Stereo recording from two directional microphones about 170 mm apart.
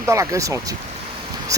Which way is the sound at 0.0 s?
15° right (ahead or behind).